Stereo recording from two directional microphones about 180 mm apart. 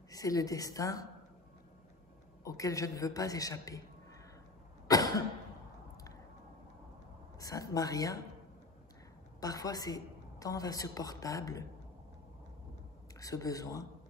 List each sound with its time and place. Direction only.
0.1 s a woman's voice: 20° left (ahead or behind)
2.4 s a woman's voice: 20° left (ahead or behind)
4.8 s cough: 20° left (ahead or behind)
7.3 s speech: 20° left (ahead or behind)
9.4 s a woman's voice: 20° left (ahead or behind)
13.2 s a woman's voice: 20° left (ahead or behind)